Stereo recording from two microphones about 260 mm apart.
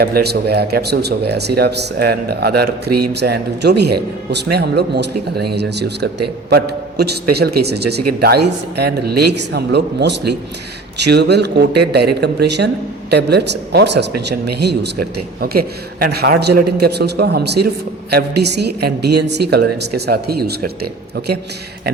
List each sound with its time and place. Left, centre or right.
0.0 s a man's voice: right